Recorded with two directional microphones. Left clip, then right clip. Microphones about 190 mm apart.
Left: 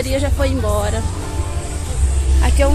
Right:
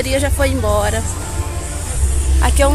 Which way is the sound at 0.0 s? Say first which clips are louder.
Right 3 dB; centre (ahead or behind).